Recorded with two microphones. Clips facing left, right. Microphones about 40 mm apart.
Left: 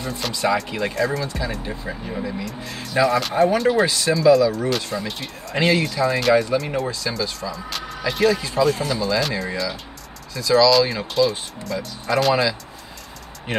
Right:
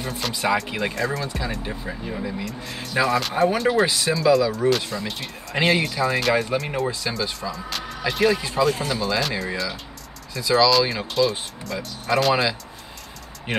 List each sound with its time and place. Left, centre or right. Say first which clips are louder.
0.3 s speech: left 1 dB; centre
6.9 s speech: left 1 dB; centre
8.6 s speech: left 2 dB; centre
10.4 s speech: left 2 dB; centre
10.7 s speech: left 2 dB; centre